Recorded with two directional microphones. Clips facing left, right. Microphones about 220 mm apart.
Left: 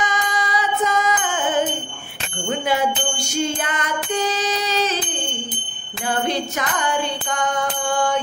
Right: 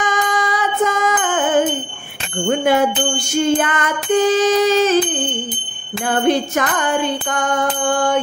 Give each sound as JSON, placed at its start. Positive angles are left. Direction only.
{"t": 0.0, "sound": "music", "side_deg": -50}
{"t": 2.6, "sound": "music", "side_deg": -50}
{"t": 6.2, "sound": "music", "side_deg": -50}